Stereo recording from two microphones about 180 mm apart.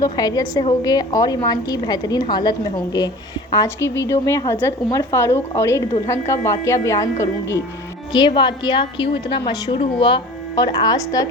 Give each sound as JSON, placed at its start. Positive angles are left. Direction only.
{"t": 0.0, "sound": "a woman's voice", "side_deg": 20}